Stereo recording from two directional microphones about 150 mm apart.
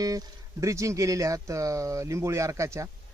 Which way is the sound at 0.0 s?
25° right (ahead or behind).